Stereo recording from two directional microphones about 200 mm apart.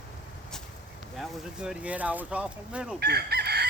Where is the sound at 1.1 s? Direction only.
Centre (ahead or behind).